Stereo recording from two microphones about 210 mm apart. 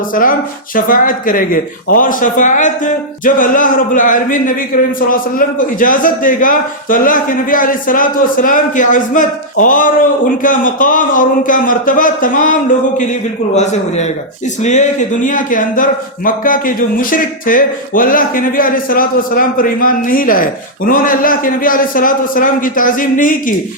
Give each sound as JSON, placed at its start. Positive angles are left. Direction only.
{"t": 0.1, "sound": "a man's voice", "side_deg": 40}
{"t": 13.6, "sound": "a man's voice", "side_deg": 35}